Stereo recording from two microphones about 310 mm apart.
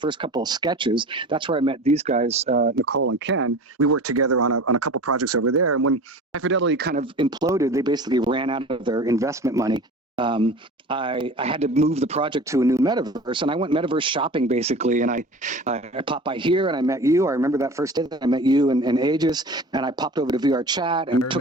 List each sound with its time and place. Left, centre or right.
0.0 s speech: centre
2.6 s speech: right
3.1 s speech: right
6.9 s speech: centre